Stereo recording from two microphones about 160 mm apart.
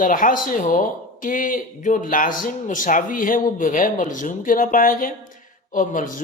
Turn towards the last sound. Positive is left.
turn(degrees=55)  # may be behind; listen again after turning